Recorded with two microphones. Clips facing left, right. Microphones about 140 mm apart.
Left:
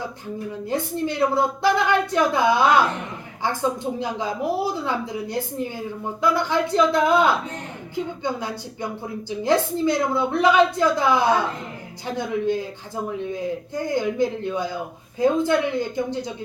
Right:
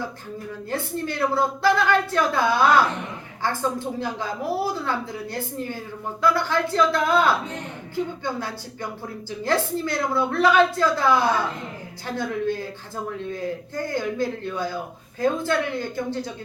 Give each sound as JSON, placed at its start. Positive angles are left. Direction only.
{"t": 0.5, "sound": "a woman's voice", "side_deg": 20}